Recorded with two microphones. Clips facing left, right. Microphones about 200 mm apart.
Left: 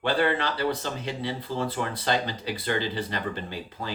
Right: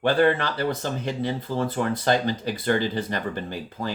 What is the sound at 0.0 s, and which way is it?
Speech, 45° right (ahead or behind).